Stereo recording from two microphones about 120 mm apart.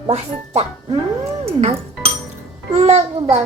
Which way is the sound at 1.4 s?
55° right (ahead or behind).